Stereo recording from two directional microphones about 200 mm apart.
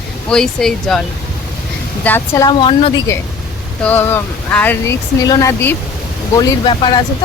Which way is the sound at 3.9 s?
10° left (ahead or behind).